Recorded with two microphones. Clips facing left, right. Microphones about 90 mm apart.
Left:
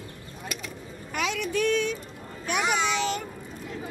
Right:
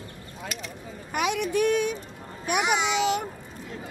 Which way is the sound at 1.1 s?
15° right (ahead or behind).